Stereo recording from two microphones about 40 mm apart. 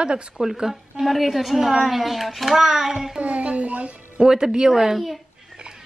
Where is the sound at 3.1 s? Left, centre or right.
Right.